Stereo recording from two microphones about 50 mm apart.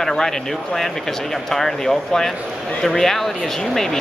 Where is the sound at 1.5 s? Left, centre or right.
Centre.